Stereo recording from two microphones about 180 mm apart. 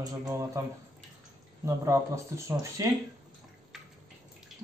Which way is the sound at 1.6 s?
15° right (ahead or behind).